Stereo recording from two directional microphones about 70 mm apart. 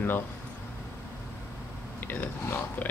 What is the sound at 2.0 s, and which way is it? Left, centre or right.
Speech, left.